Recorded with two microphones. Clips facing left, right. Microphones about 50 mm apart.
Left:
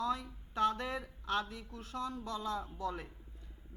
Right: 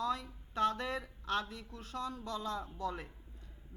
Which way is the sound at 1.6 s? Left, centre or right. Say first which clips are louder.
Even; left.